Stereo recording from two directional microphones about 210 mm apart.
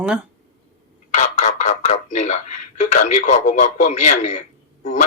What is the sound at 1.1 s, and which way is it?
Speech, 35° left (ahead or behind).